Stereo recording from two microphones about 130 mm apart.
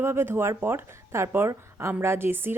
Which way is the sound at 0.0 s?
20° right (ahead or behind).